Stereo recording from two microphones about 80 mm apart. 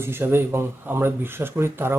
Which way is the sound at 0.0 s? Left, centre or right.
Right.